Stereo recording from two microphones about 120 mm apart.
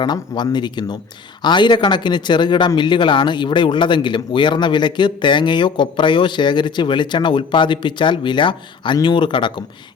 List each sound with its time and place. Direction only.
0.0 s a man's voice: 35° left (ahead or behind)